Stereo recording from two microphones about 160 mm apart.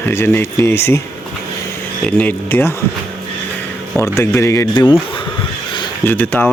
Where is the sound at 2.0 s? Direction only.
10° left (ahead or behind).